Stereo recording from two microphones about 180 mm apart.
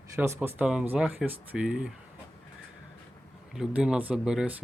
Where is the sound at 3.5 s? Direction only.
5° right (ahead or behind).